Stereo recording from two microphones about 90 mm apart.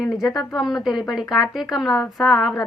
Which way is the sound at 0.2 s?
45° left (ahead or behind).